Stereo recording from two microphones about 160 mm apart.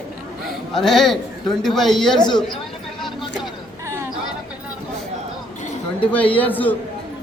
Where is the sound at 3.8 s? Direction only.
15° right (ahead or behind).